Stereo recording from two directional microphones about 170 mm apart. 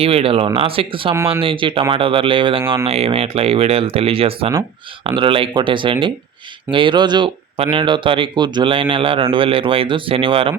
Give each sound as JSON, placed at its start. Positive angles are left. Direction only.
{"t": 0.0, "sound": "speech", "side_deg": -35}